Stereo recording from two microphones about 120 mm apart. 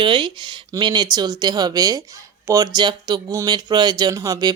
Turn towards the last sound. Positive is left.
turn(degrees=-30)  # may be behind; listen again after turning